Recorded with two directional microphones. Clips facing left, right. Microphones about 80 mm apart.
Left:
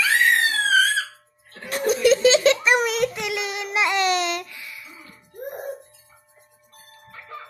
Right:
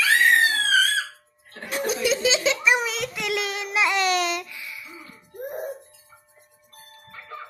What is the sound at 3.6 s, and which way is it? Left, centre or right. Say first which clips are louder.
Babbling: left 2 dB; left.